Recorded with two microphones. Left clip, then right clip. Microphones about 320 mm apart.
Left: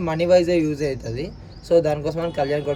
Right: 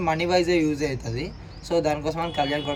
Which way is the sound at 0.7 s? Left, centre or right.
Right.